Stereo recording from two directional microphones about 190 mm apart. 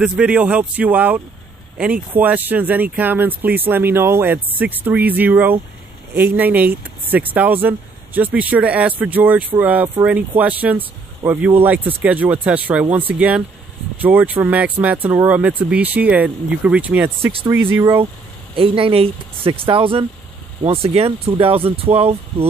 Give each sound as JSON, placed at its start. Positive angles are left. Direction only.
{"t": 0.0, "sound": "speech", "side_deg": -5}
{"t": 18.6, "sound": "speech", "side_deg": -30}